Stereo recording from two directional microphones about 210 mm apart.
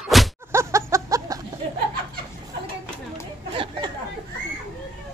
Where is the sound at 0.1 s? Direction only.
Centre (ahead or behind).